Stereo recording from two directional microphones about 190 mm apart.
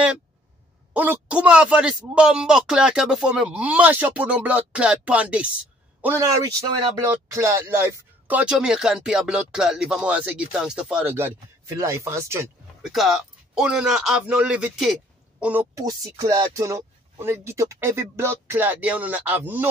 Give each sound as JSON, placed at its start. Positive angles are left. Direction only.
{"t": 0.9, "sound": "speech", "side_deg": -10}
{"t": 12.8, "sound": "speech", "side_deg": 0}
{"t": 15.4, "sound": "speech", "side_deg": -15}